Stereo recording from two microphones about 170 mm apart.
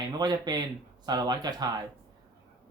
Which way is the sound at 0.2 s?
25° right (ahead or behind).